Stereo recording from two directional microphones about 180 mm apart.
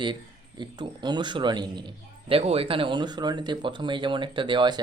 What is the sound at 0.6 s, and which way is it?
Speech, 25° right (ahead or behind).